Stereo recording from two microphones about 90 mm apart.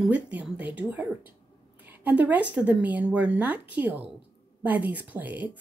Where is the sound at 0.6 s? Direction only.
20° right (ahead or behind).